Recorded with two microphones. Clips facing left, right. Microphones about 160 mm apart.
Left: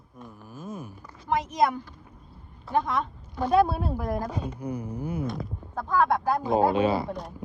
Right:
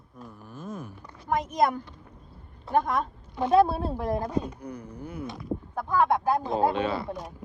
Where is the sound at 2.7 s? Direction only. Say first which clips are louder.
Right 1 dB; 45° right (ahead or behind).